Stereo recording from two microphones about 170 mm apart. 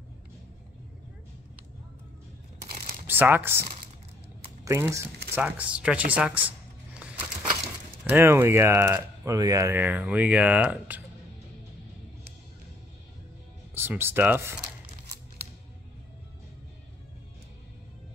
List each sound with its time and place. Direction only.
3.1 s speech: 10° right (ahead or behind)
4.6 s speech: 15° right (ahead or behind)
13.7 s speech: 15° right (ahead or behind)